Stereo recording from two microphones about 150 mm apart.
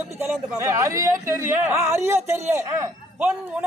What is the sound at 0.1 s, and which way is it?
Speech, 15° right (ahead or behind).